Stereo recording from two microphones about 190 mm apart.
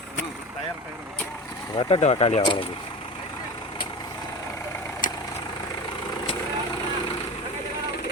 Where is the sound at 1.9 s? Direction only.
35° left (ahead or behind).